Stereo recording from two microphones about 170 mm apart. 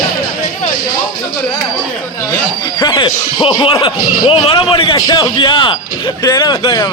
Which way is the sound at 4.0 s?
55° left (ahead or behind).